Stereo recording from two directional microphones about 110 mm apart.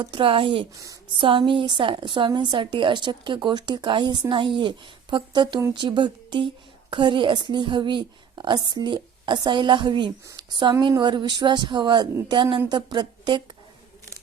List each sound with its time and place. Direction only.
0.0 s a woman's voice: 50° right (ahead or behind)